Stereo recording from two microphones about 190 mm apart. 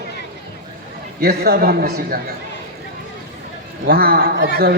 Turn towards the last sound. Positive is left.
turn(degrees=-55)  # may be behind; listen again after turning